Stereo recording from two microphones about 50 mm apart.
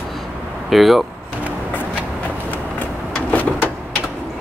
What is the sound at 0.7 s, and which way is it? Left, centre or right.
Speech, centre.